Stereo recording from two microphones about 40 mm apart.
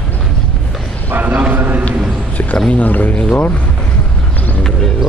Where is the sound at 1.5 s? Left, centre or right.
Right.